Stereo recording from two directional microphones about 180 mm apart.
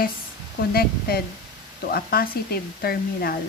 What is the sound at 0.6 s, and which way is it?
A woman's voice, 60° left (ahead or behind).